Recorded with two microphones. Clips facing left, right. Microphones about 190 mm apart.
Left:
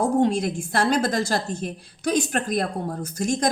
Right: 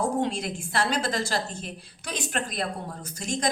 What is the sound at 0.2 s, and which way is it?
A woman's voice, 45° left (ahead or behind).